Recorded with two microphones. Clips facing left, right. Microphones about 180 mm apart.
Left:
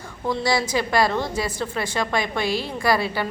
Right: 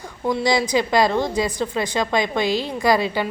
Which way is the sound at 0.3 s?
15° right (ahead or behind).